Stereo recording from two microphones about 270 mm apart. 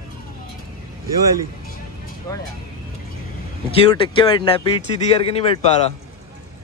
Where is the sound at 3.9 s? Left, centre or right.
Centre.